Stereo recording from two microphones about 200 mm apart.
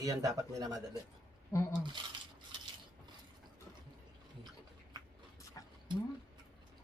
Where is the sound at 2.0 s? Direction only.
25° right (ahead or behind).